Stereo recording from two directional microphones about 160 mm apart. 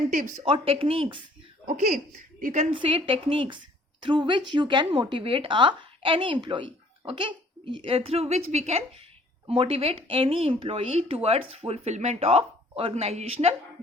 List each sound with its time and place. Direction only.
0.1 s speech: 50° right (ahead or behind)
0.4 s a woman's voice: 35° right (ahead or behind)
1.6 s speech: 50° right (ahead or behind)
2.6 s a woman's voice: 35° right (ahead or behind)